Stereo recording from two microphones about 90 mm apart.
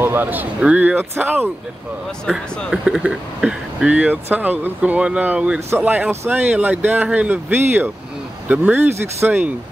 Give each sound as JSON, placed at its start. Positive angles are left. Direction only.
{"t": 0.0, "sound": "a sound", "side_deg": -25}
{"t": 0.6, "sound": "speech", "side_deg": -15}
{"t": 2.7, "sound": "speech", "side_deg": -10}
{"t": 9.0, "sound": "speech", "side_deg": -30}